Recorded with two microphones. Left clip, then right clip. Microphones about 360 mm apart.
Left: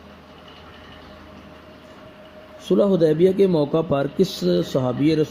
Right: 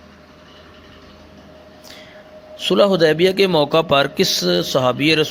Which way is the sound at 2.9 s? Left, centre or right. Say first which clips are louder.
Right 3 dB; right.